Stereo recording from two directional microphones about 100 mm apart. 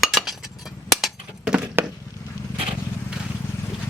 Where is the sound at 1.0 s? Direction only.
10° right (ahead or behind).